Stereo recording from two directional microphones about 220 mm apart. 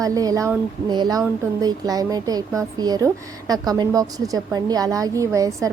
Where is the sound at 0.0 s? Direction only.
15° right (ahead or behind).